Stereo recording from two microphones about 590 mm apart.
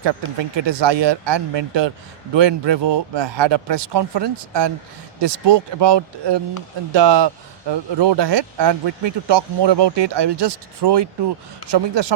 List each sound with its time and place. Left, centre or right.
0.5 s speech: right